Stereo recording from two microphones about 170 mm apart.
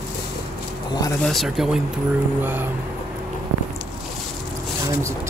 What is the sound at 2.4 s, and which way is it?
Speech, 10° right (ahead or behind).